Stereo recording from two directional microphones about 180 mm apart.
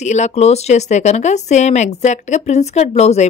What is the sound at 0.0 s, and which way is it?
Speech, 40° left (ahead or behind).